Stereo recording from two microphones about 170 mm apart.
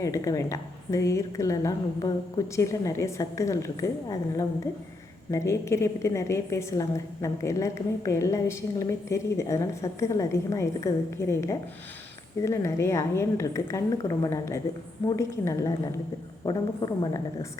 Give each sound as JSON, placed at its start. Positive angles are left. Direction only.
{"t": 0.0, "sound": "a woman's voice", "side_deg": 20}